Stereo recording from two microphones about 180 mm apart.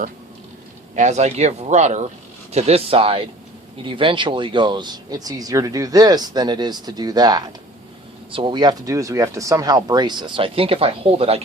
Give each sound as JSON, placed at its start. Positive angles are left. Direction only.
{"t": 0.9, "sound": "speech", "side_deg": -40}